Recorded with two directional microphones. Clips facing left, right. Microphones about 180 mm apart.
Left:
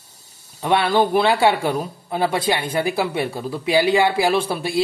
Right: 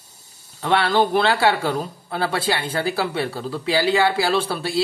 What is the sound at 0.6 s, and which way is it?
A man's voice, 15° left (ahead or behind).